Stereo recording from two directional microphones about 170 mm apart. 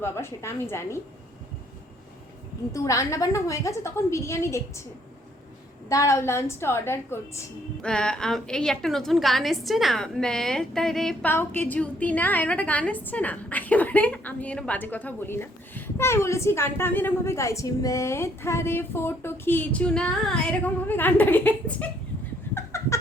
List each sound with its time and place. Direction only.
0.0 s a woman's voice: 15° left (ahead or behind)
2.7 s a woman's voice: 20° left (ahead or behind)
5.9 s a woman's voice: 20° left (ahead or behind)
22.5 s a sound: 15° left (ahead or behind)